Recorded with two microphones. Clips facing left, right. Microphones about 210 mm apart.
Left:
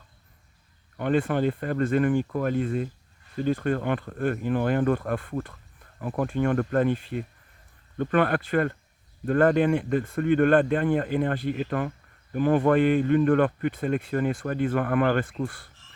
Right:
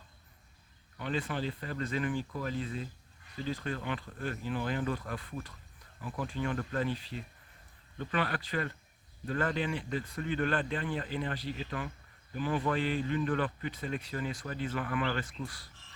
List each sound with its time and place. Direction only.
0.9 s speech: 55° left (ahead or behind)